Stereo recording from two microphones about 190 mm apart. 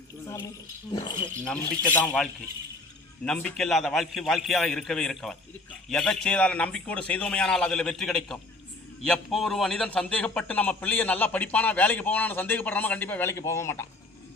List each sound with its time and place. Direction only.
0.9 s speech: 25° left (ahead or behind)
1.5 s a man's voice: 5° left (ahead or behind)
3.2 s a man's voice: 5° left (ahead or behind)